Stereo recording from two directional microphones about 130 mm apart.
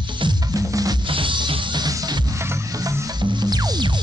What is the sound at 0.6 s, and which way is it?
Music, 25° right (ahead or behind).